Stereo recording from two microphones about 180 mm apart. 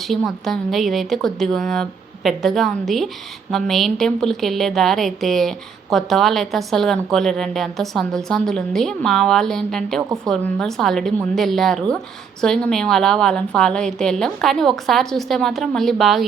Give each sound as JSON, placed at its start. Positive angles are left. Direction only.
{"t": 0.0, "sound": "a woman's voice", "side_deg": 0}